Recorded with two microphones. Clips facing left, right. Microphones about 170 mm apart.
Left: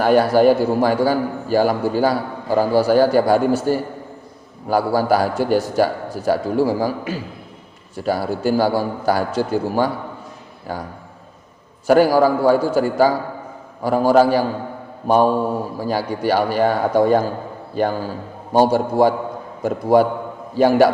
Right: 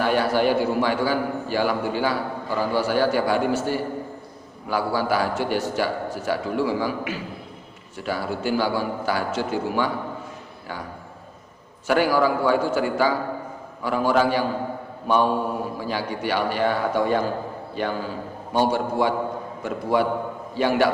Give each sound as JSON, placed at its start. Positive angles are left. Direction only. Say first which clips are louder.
{"t": 0.0, "sound": "a man's voice", "louder": "left 7 dB", "side_deg": 40}
{"t": 11.9, "sound": "a man's voice", "louder": "left 6 dB", "side_deg": 40}